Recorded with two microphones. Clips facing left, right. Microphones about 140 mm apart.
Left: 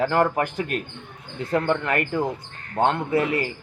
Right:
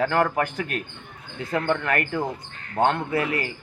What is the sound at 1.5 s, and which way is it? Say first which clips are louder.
Speech: left 1 dB; centre (ahead or behind).